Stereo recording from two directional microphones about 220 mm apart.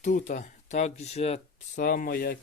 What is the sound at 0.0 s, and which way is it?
Speech, 35° left (ahead or behind).